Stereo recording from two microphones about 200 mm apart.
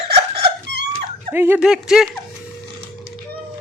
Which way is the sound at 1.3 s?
10° right (ahead or behind).